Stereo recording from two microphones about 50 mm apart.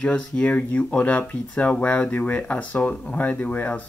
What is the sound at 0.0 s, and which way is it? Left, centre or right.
Speech, centre.